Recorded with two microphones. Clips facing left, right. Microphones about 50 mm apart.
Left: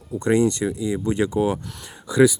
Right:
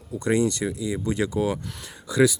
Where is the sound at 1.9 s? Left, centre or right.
Centre.